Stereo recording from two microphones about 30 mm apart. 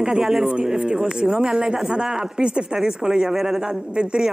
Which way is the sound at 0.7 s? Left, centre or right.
Right.